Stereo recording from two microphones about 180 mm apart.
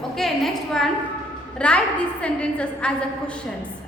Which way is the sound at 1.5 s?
5° left (ahead or behind).